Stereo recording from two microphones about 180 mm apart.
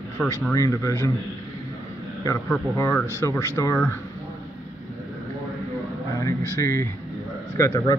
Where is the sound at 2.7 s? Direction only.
15° left (ahead or behind).